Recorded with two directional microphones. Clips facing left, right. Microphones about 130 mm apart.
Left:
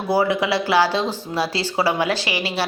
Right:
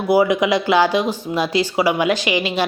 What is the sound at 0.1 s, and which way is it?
Speech, 15° right (ahead or behind).